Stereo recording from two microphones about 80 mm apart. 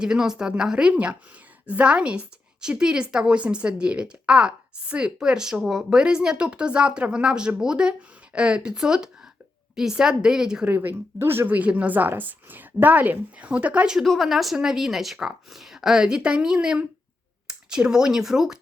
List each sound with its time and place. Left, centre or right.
0.0 s a woman's voice: centre
10.7 s speech: right
13.9 s speech: centre